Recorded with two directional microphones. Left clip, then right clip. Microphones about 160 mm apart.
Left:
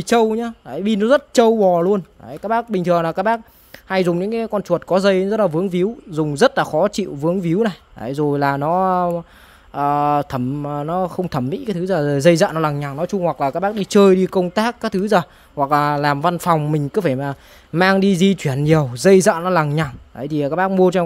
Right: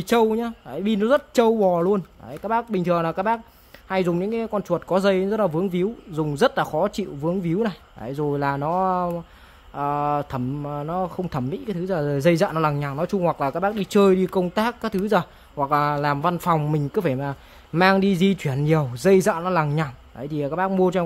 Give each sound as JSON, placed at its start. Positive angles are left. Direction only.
{"t": 0.0, "sound": "speech", "side_deg": 35}